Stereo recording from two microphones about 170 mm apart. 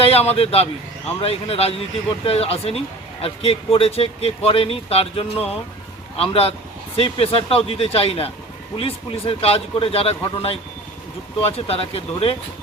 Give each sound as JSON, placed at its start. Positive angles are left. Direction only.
{"t": 0.0, "sound": "a man's voice", "side_deg": 35}